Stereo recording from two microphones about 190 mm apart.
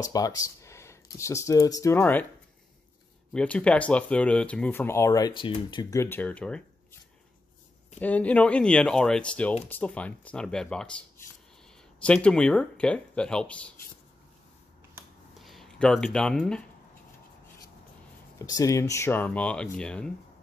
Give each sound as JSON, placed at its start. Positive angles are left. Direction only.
{"t": 0.0, "sound": "speech", "side_deg": 20}
{"t": 3.3, "sound": "speech", "side_deg": 5}
{"t": 8.0, "sound": "speech", "side_deg": 10}
{"t": 15.3, "sound": "speech", "side_deg": 0}
{"t": 18.4, "sound": "speech", "side_deg": 20}